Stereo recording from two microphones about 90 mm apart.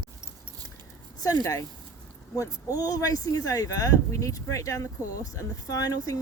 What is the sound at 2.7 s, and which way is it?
Speech, 40° left (ahead or behind).